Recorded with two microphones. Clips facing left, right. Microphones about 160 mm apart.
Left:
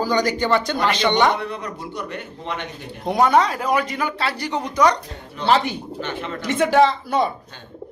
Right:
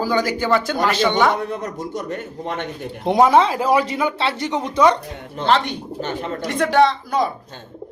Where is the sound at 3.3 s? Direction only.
25° right (ahead or behind).